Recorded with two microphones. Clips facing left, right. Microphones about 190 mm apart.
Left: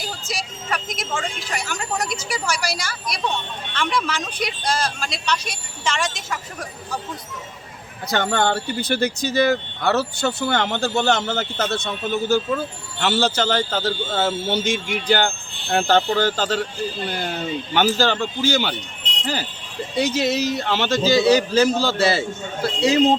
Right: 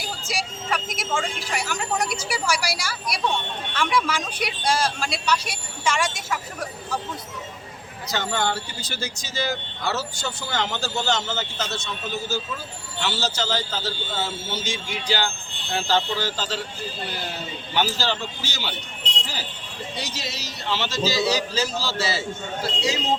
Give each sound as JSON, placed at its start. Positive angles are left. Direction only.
{"t": 0.3, "sound": "speech", "side_deg": -10}
{"t": 8.0, "sound": "speech", "side_deg": 55}
{"t": 17.7, "sound": "speech", "side_deg": 50}